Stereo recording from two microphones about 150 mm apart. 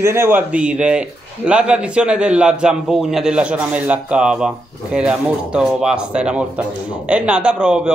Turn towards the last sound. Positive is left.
turn(degrees=-5)  # may be behind; listen again after turning